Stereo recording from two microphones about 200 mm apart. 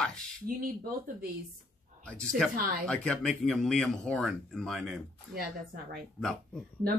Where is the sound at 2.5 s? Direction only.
45° right (ahead or behind).